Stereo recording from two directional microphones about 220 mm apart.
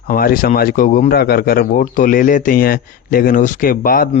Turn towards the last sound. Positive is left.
turn(degrees=40)  # may be behind; listen again after turning